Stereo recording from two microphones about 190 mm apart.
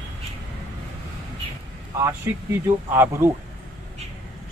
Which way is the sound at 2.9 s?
15° right (ahead or behind).